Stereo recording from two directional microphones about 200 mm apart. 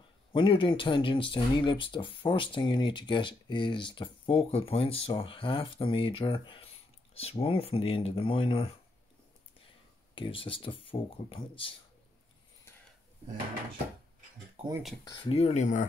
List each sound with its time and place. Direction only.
0.3 s speech: 25° left (ahead or behind)
10.1 s speech: 25° left (ahead or behind)
15.0 s speech: 30° left (ahead or behind)